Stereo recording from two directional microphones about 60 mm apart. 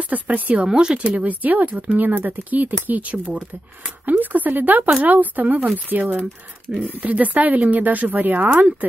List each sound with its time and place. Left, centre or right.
0.0 s speech: right
0.7 s speech: centre; by 8.6 s right